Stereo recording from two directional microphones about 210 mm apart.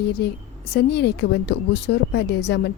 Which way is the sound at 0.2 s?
50° left (ahead or behind).